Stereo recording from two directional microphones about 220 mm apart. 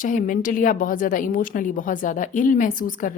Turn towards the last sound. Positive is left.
turn(degrees=35)  # may be behind; listen again after turning